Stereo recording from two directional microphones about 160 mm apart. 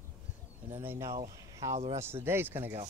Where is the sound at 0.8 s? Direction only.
15° right (ahead or behind).